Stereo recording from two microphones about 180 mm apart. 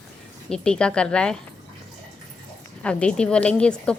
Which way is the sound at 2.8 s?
5° left (ahead or behind).